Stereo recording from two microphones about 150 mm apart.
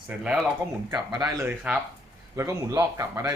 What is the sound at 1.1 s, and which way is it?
Speech, 25° right (ahead or behind).